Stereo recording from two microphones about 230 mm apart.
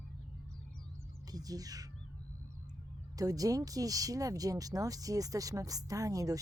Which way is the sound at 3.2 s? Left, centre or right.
Centre.